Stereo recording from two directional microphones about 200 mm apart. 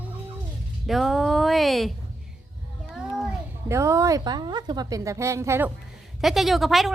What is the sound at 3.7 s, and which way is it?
A woman's voice, 15° right (ahead or behind).